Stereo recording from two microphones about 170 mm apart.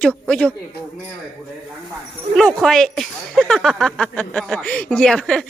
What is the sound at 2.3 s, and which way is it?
Speech, 5° left (ahead or behind).